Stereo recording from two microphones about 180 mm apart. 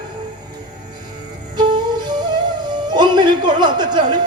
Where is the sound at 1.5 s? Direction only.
25° right (ahead or behind).